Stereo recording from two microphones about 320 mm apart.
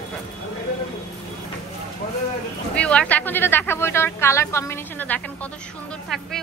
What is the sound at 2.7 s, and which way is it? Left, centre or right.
A woman's voice, centre.